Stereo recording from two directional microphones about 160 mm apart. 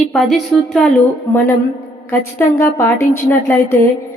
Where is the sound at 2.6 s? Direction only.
15° left (ahead or behind).